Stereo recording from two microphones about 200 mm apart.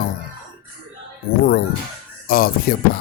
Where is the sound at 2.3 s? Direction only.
50° left (ahead or behind).